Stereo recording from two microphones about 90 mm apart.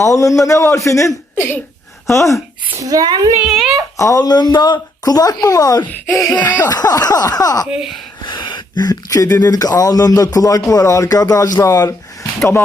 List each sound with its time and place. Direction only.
0.0 s a man's voice: 35° left (ahead or behind)
1.4 s a sound: 20° left (ahead or behind)
2.1 s a man's voice: 35° left (ahead or behind)
2.7 s speech: 40° right (ahead or behind)
3.4 s a child's voice: 5° right (ahead or behind)
3.9 s speech: 35° left (ahead or behind)
6.3 s a sound: 20° left (ahead or behind)
6.7 s speech: 45° left (ahead or behind)
7.7 s a child's voice: 5° right (ahead or behind)
8.2 s speech: 60° left (ahead or behind); by 12.3 s 40° left (ahead or behind)